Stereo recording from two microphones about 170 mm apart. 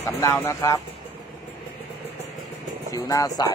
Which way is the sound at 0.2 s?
15° left (ahead or behind).